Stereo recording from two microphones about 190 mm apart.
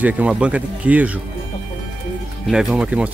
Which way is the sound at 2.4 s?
Centre (ahead or behind).